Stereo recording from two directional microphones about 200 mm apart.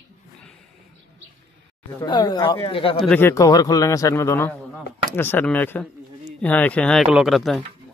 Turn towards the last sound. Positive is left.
turn(degrees=0)  # may be behind; listen again after turning